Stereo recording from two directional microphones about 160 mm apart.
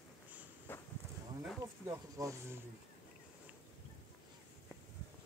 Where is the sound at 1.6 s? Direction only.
20° right (ahead or behind).